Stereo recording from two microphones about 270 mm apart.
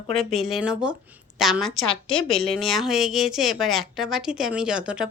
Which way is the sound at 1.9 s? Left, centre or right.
Centre.